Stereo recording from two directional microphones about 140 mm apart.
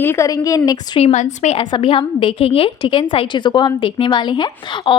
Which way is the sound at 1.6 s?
35° left (ahead or behind).